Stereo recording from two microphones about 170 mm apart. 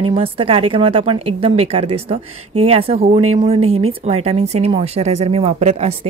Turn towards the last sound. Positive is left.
turn(degrees=-40)  # may be behind; listen again after turning